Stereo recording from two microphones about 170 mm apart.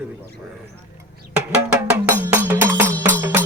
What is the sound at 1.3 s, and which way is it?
Music, 10° right (ahead or behind).